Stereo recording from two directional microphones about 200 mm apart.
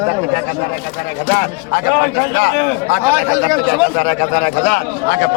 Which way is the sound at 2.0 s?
55° left (ahead or behind).